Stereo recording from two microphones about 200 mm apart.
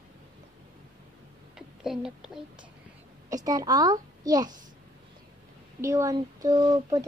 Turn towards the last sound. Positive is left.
turn(degrees=-20)  # may be behind; listen again after turning